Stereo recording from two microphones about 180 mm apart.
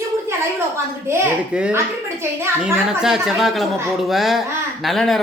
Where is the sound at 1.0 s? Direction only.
10° right (ahead or behind).